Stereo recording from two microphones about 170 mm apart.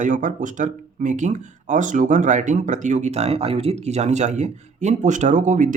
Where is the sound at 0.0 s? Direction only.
50° right (ahead or behind).